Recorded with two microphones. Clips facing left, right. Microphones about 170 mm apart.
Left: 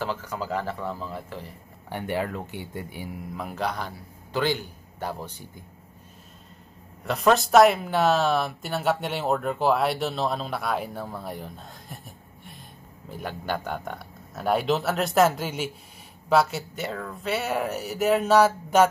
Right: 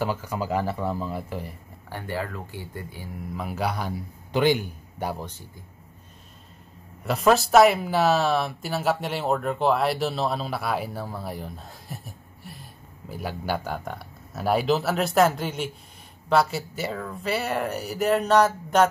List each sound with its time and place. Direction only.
0.0 s a man's voice: 10° right (ahead or behind)
1.9 s speech: 20° left (ahead or behind)
3.2 s a man's voice: centre (ahead or behind)
7.1 s speech: centre (ahead or behind)